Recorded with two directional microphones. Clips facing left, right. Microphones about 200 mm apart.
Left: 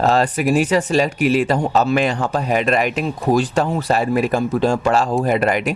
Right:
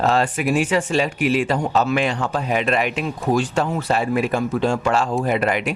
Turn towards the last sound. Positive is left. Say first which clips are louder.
# left 3 dB
turn(degrees=40)  # may be behind; listen again after turning